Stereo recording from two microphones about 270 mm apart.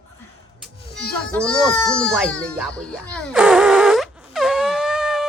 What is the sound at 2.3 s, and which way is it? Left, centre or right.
Music, centre.